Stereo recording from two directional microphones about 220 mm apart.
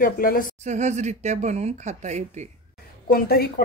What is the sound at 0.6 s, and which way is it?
Speech, 30° right (ahead or behind).